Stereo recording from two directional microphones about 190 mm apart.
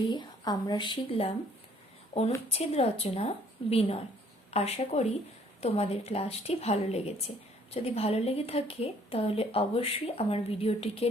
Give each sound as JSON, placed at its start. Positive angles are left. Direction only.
{"t": 0.1, "sound": "a woman's voice", "side_deg": 25}
{"t": 2.5, "sound": "speech", "side_deg": 30}